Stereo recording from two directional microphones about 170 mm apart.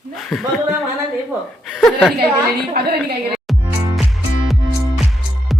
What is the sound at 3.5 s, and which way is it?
Music, centre (ahead or behind).